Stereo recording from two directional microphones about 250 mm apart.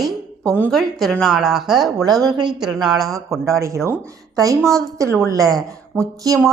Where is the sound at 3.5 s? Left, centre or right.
Centre.